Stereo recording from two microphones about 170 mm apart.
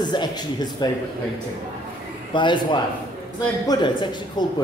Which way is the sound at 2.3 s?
30° left (ahead or behind).